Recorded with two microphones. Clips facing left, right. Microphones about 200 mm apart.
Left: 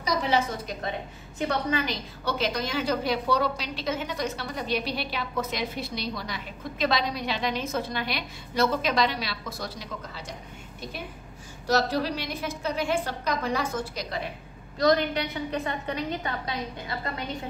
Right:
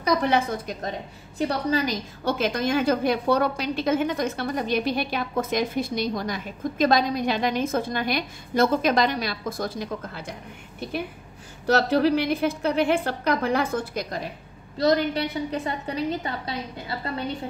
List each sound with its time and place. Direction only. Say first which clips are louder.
0.0 s a woman's voice: right 4 dB; 55° right (ahead or behind)
1.4 s a woman's voice: right 3 dB; 35° right (ahead or behind); by 10.3 s 55° right (ahead or behind)
11.6 s a woman's voice: right 5 dB; 60° right (ahead or behind)
14.8 s a woman's voice: right 2 dB; 30° right (ahead or behind)